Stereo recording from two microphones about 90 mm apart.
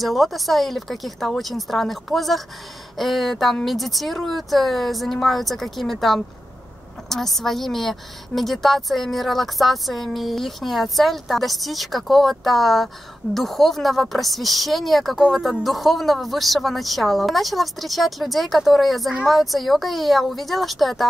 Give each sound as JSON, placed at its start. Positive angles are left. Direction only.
{"t": 0.0, "sound": "a woman's voice", "side_deg": 0}